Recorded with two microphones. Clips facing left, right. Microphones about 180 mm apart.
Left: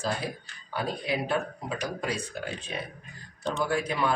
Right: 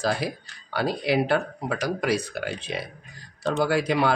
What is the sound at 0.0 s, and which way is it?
Speech, 80° right.